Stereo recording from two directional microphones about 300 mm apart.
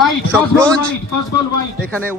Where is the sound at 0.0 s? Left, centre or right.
Centre.